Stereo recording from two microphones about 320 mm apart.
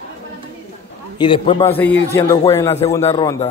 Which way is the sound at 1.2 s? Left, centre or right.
Centre.